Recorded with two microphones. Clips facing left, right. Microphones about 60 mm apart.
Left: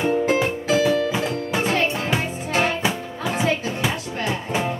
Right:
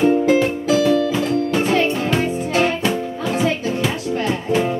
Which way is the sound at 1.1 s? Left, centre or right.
Centre.